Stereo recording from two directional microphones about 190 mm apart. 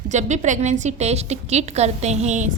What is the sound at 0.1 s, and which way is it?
A woman's voice, 40° right (ahead or behind).